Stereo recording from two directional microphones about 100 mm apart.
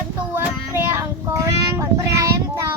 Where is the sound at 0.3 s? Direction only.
25° right (ahead or behind).